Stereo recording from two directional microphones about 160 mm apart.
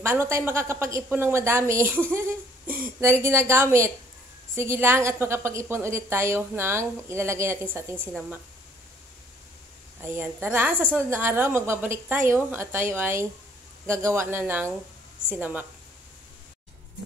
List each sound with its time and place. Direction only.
0.0 s a woman's voice: 15° right (ahead or behind)
9.9 s a woman's voice: 15° right (ahead or behind)